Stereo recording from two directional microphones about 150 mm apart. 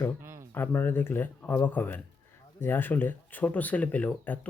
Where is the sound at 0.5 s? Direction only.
15° left (ahead or behind).